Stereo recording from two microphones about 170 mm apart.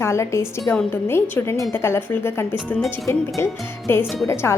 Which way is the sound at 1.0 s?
15° left (ahead or behind).